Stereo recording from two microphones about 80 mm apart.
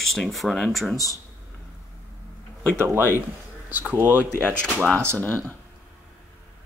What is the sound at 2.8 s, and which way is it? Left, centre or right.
Speech, right.